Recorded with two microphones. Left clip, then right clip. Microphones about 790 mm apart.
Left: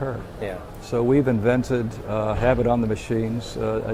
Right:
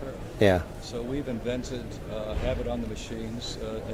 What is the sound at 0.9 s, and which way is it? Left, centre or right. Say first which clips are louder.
Speech: left 13 dB; left.